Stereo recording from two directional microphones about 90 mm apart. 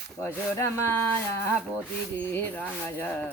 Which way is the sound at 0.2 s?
30° left (ahead or behind).